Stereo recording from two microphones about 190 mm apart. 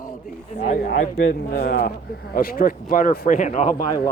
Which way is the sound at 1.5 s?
55° left (ahead or behind).